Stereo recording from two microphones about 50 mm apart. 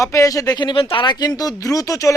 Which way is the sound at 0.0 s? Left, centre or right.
Left.